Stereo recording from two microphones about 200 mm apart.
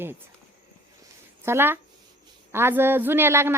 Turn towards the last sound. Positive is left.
turn(degrees=-10)  # may be behind; listen again after turning